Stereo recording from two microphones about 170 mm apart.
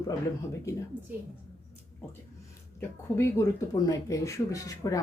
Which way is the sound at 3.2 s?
15° left (ahead or behind).